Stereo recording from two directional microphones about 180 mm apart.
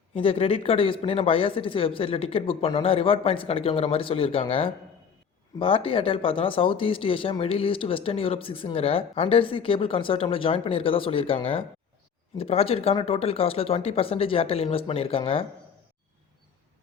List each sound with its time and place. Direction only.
0.1 s speech: 30° left (ahead or behind)